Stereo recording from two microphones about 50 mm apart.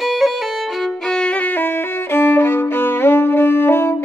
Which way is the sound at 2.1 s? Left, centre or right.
Left.